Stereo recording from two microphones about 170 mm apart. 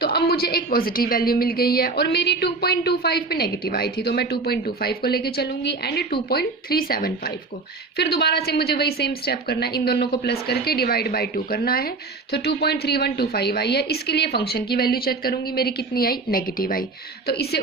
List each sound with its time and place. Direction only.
0.0 s a woman's voice: 65° left (ahead or behind)
7.9 s a woman's voice: 75° left (ahead or behind); by 16.8 s 55° left (ahead or behind)
17.2 s a woman's voice: 70° left (ahead or behind)